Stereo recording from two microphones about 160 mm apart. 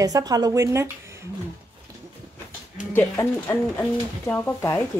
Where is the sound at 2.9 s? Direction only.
15° left (ahead or behind).